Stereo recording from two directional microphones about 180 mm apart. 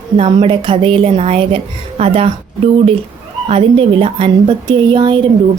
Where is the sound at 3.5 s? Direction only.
30° right (ahead or behind).